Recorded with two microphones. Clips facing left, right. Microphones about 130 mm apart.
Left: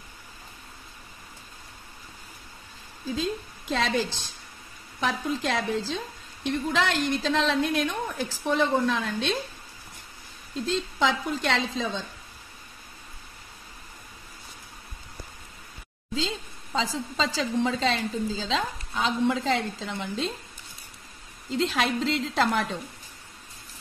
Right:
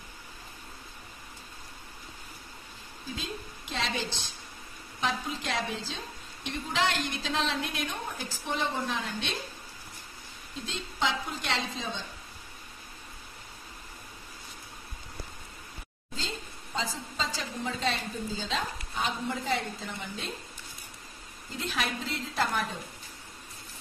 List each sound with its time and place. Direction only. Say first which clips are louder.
3.2 s a woman's voice: left 10 dB; 90° left
5.0 s a woman's voice: left 5 dB; 65° left (ahead or behind); by 7.0 s 85° left
7.2 s speech: left 5 dB; 75° left (ahead or behind)
7.8 s a woman's voice: left 7 dB; 85° left
10.5 s a woman's voice: left 11 dB; 90° left
16.2 s a woman's voice: left 7 dB; 90° left
21.5 s a woman's voice: left 8 dB; 90° left